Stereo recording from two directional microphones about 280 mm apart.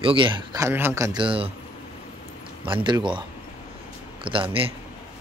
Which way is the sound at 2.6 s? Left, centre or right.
Centre.